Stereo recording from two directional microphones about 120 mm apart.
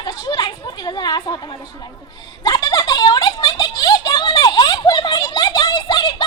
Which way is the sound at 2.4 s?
35° left (ahead or behind).